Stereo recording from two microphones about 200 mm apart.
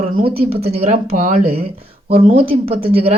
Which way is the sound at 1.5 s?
30° right (ahead or behind).